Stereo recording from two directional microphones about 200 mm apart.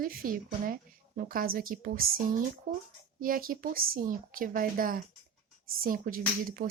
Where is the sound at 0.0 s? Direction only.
45° right (ahead or behind).